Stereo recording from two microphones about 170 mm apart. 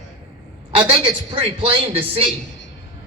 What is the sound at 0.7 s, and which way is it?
A man's voice, 30° right (ahead or behind).